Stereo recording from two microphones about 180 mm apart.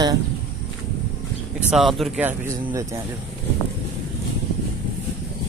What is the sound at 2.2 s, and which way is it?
Speech, 15° right (ahead or behind).